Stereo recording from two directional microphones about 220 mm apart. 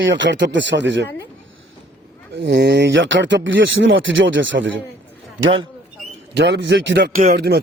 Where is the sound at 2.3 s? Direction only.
50° right (ahead or behind).